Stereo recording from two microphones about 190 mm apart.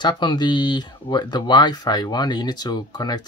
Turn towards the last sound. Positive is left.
turn(degrees=20)  # may be behind; listen again after turning